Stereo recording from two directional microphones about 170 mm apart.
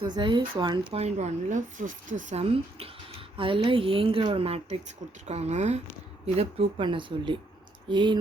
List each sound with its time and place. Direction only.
0.0 s speech: 30° right (ahead or behind)
0.9 s speech: 40° right (ahead or behind)
2.4 s speech: 35° right (ahead or behind)